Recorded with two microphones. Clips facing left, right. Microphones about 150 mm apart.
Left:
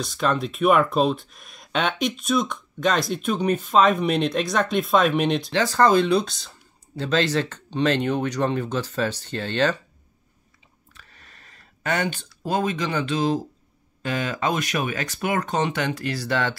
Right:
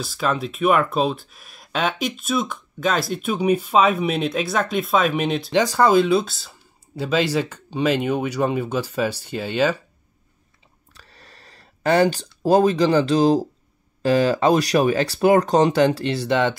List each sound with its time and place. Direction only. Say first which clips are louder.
0.0 s speech: even; 5° right (ahead or behind)
5.5 s speech: right 3 dB; 15° right (ahead or behind)
10.9 s a sound: right 3 dB; 35° right (ahead or behind)
14.0 s speech: right 8 dB; 35° right (ahead or behind)